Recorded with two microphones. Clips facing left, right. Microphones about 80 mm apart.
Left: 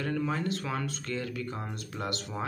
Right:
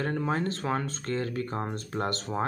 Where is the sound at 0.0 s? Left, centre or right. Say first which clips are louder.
Right 2 dB; right.